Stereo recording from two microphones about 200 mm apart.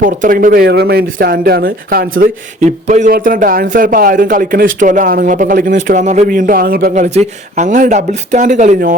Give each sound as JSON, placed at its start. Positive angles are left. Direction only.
{"t": 0.0, "sound": "speech", "side_deg": -45}